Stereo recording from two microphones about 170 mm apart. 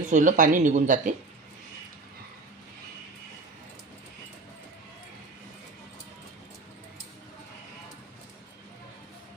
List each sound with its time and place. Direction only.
0.1 s speech: 50° right (ahead or behind)